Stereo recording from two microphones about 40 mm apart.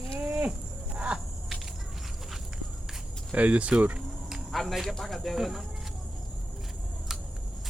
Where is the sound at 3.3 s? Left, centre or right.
Right.